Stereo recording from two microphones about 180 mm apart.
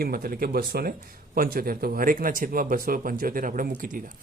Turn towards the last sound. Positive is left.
turn(degrees=-45)  # may be behind; listen again after turning